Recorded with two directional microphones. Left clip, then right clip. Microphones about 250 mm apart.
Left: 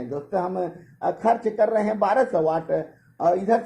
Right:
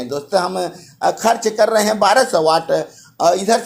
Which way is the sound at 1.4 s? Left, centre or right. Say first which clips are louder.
Right 6 dB; centre.